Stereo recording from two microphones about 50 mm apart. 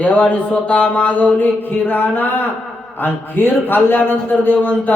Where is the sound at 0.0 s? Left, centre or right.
Left.